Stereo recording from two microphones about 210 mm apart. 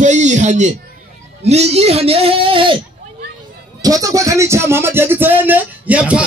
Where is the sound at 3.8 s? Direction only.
15° right (ahead or behind).